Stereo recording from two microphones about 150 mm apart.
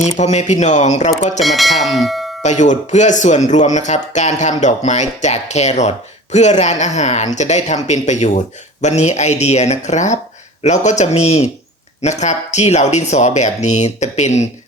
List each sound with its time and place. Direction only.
0.2 s speech: 50° left (ahead or behind)
1.4 s speech: centre (ahead or behind)
2.4 s speech: 50° left (ahead or behind)